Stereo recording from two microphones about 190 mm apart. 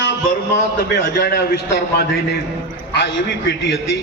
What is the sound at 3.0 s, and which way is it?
A man's voice, 70° left (ahead or behind).